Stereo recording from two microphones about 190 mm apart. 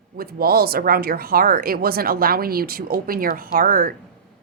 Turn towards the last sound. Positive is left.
turn(degrees=-45)  # may be behind; listen again after turning